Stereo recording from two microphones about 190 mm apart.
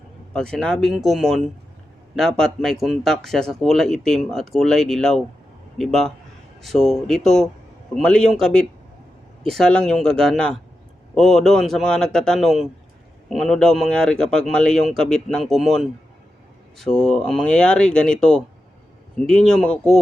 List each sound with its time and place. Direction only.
0.3 s speech: 5° left (ahead or behind)